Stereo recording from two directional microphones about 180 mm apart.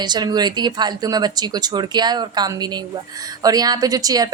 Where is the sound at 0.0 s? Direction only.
25° right (ahead or behind).